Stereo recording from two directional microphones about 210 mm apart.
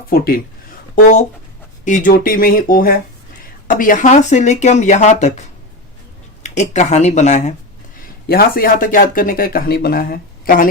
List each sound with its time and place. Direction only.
1.0 s speech: 35° left (ahead or behind)
6.4 s speech: 35° left (ahead or behind)
8.3 s speech: 45° left (ahead or behind)